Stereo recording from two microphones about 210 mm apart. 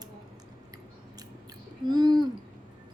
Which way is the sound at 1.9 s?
20° right (ahead or behind).